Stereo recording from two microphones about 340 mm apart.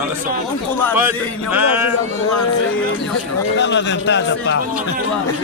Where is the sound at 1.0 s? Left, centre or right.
Centre.